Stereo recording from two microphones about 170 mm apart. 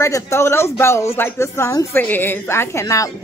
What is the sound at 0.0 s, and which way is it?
Speech, 15° left (ahead or behind).